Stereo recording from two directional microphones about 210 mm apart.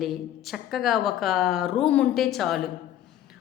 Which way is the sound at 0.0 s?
Centre (ahead or behind).